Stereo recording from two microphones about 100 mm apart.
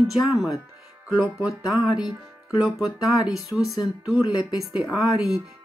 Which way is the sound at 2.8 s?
35° left (ahead or behind).